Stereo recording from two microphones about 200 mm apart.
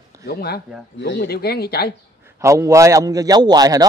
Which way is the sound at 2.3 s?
15° right (ahead or behind).